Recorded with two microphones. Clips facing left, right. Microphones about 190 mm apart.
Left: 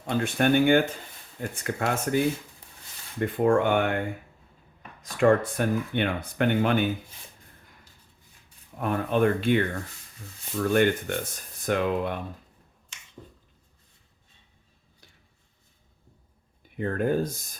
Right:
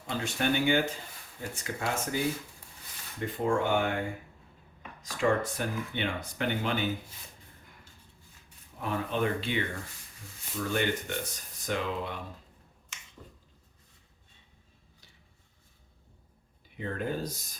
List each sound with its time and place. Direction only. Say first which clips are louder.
0.1 s speech: left 7 dB; 55° left (ahead or behind)
5.2 s speech: left 7 dB; 55° left (ahead or behind)
8.8 s speech: left 7 dB; 55° left (ahead or behind)
16.6 s speech: left 8 dB; 50° left (ahead or behind)